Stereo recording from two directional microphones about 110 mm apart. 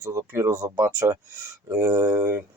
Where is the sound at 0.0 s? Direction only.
25° right (ahead or behind).